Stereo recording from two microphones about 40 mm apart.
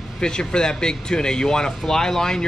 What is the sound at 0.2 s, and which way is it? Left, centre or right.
Speech, centre.